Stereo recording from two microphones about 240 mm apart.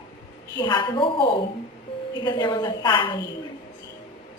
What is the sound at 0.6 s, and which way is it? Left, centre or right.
Speech, centre.